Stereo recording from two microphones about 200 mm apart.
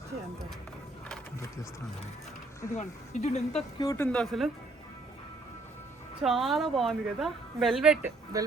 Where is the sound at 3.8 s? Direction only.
15° left (ahead or behind).